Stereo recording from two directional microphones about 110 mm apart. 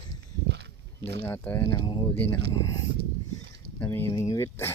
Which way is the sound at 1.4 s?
20° left (ahead or behind).